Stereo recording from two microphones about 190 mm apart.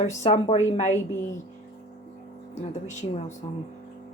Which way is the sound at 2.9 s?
40° left (ahead or behind).